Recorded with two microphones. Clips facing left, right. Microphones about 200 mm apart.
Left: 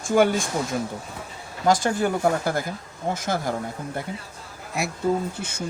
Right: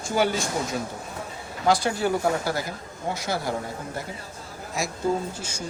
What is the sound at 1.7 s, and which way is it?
Speech, 45° left (ahead or behind).